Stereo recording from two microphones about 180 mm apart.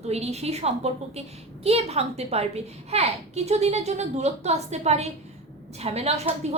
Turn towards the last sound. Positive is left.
turn(degrees=-35)  # may be behind; listen again after turning